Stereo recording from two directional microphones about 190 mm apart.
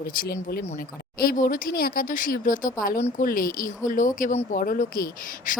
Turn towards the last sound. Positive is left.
turn(degrees=45)  # may be behind; listen again after turning